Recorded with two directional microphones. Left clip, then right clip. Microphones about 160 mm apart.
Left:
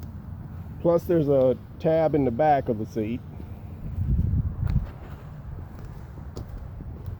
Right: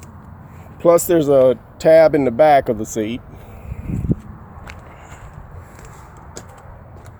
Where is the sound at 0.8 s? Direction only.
50° right (ahead or behind).